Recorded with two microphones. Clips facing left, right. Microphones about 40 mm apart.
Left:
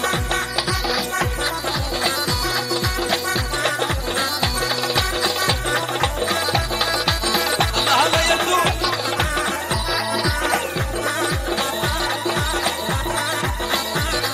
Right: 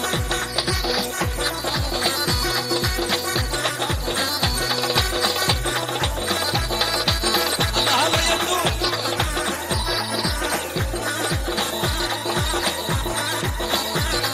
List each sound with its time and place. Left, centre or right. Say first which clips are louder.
3.6 s music: left 3 dB; left
4.8 s music: even; left
5.7 s music: left 3 dB; left
11.2 s music: left 2 dB; left